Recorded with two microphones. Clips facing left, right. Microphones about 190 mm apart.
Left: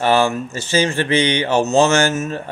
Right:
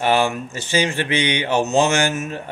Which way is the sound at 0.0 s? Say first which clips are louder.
Left 2 dB; 15° right (ahead or behind).